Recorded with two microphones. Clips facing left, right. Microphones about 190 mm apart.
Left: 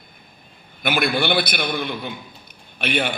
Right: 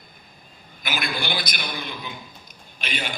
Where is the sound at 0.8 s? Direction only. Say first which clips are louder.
Left 8 dB; 60° left (ahead or behind).